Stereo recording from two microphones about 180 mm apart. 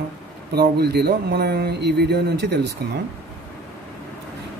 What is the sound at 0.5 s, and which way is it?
Speech, 65° right (ahead or behind).